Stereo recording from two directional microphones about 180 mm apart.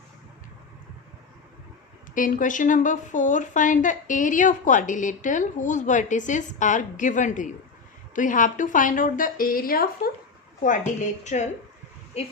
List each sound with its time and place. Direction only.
2.1 s a woman's voice: 50° left (ahead or behind)